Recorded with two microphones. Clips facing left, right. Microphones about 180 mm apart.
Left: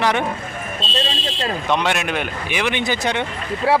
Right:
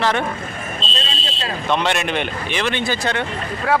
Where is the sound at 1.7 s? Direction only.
10° left (ahead or behind).